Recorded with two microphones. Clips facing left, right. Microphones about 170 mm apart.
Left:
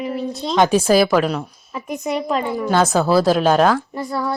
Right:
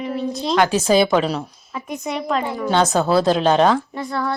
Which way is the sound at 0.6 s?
20° left (ahead or behind).